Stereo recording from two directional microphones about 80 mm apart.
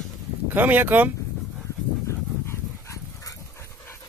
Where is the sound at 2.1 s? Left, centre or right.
Left.